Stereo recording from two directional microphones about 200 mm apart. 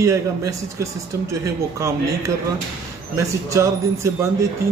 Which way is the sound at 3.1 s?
15° right (ahead or behind).